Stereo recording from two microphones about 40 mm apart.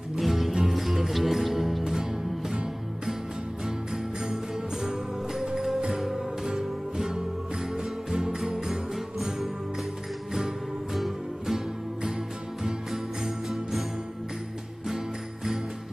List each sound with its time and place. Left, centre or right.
0.1 s music: centre
3.6 s music: centre
12.6 s jingle bell: centre